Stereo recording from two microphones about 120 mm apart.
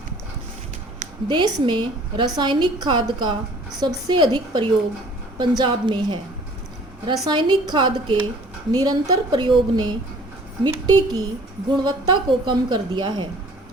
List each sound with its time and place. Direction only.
1.3 s a woman's voice: 40° right (ahead or behind)